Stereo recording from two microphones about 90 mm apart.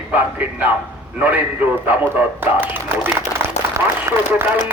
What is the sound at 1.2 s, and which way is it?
A man's voice, 15° right (ahead or behind).